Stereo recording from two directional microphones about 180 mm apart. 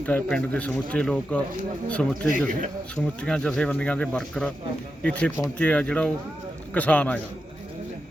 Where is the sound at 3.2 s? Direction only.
5° left (ahead or behind).